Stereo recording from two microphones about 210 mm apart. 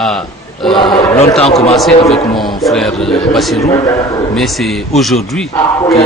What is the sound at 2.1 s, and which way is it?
A man's voice, centre (ahead or behind).